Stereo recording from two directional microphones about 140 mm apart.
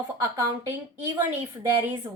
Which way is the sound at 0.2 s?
25° right (ahead or behind).